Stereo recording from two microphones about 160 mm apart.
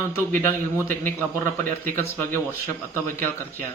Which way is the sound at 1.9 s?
15° left (ahead or behind).